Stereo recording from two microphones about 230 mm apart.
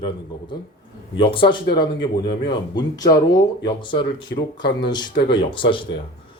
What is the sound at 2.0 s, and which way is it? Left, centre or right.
Speech, left.